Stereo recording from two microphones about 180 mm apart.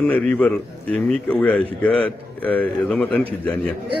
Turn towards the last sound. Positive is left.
turn(degrees=5)  # may be behind; listen again after turning